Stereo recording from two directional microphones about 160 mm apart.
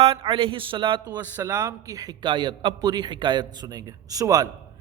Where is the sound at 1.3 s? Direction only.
15° right (ahead or behind).